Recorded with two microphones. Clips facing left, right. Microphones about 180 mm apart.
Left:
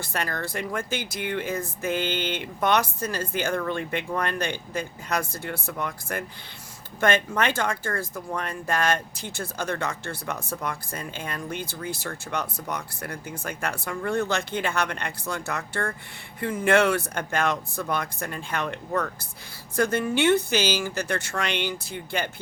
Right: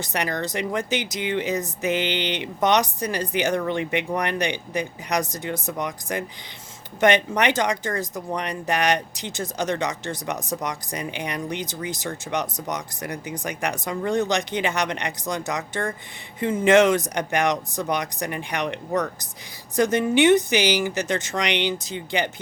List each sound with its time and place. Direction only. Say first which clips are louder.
0.0 s speech: right 4 dB; 20° right (ahead or behind)